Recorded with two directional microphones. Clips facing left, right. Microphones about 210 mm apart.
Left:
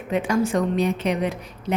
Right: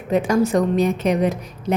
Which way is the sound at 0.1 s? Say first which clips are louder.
Right 4 dB; 40° right (ahead or behind).